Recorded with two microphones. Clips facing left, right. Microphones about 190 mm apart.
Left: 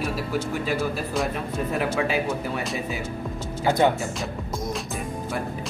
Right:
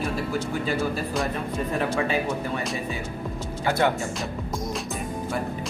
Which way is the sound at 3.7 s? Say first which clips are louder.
Left 3 dB; 20° left (ahead or behind).